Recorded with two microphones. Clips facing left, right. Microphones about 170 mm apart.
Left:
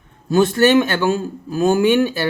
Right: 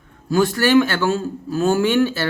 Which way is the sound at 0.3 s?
20° left (ahead or behind).